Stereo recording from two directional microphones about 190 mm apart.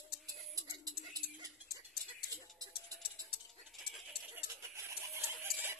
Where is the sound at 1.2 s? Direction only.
55° left (ahead or behind).